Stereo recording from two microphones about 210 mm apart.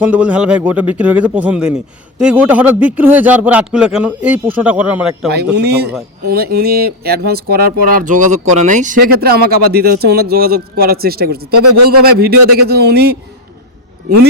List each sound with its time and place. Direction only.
0.0 s speech: 5° right (ahead or behind)
5.5 s speech: 50° right (ahead or behind)